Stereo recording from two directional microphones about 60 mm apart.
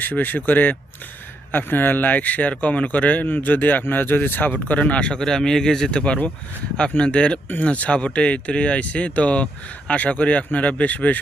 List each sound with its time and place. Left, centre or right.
0.0 s speech: left